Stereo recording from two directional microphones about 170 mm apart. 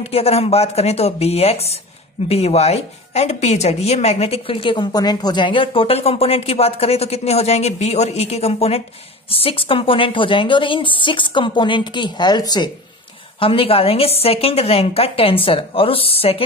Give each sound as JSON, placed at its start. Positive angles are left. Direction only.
{"t": 0.0, "sound": "a woman's voice", "side_deg": 35}